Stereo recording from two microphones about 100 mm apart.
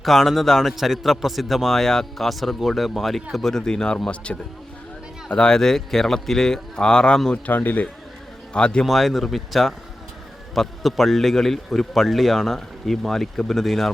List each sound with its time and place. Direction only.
0.0 s a man's voice: centre (ahead or behind)
7.5 s a man's voice: 20° left (ahead or behind); by 13.9 s centre (ahead or behind)